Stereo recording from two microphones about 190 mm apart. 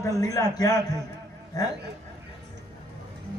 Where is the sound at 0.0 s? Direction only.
20° left (ahead or behind).